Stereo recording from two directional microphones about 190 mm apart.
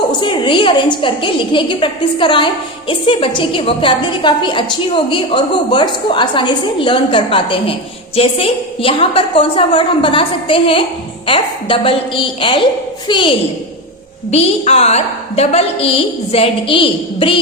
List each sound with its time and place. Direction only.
0.2 s a woman's voice: 25° left (ahead or behind)